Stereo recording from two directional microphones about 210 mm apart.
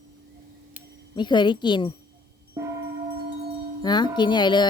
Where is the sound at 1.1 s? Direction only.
20° left (ahead or behind).